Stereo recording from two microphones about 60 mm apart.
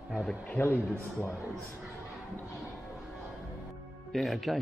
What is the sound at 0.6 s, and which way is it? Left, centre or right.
Speech, left.